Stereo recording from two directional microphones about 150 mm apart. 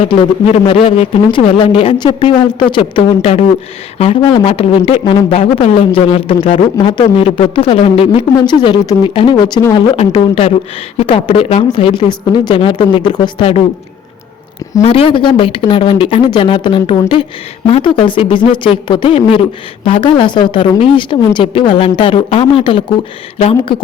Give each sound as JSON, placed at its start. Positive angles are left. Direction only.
{"t": 0.0, "sound": "a man's voice", "side_deg": 40}
{"t": 14.8, "sound": "a man's voice", "side_deg": 40}